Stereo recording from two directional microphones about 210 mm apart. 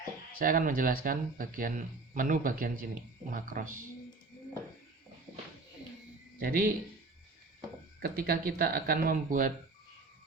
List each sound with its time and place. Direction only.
0.3 s speech: 40° right (ahead or behind)
6.4 s speech: 45° right (ahead or behind)
7.9 s speech: 45° right (ahead or behind)